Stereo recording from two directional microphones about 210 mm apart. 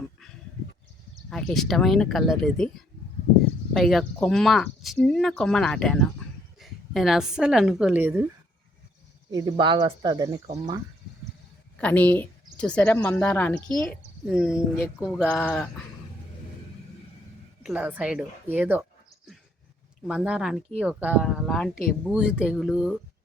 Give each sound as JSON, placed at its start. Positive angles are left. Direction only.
{"t": 1.3, "sound": "speech", "side_deg": 5}
{"t": 3.8, "sound": "a woman's voice", "side_deg": 0}
{"t": 9.3, "sound": "speech", "side_deg": -20}
{"t": 11.8, "sound": "speech", "side_deg": 5}
{"t": 17.6, "sound": "speech", "side_deg": -5}
{"t": 20.1, "sound": "speech", "side_deg": -5}